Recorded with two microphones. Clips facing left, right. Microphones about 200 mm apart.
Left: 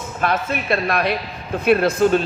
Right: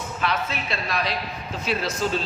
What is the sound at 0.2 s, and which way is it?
A man's voice, 55° left (ahead or behind).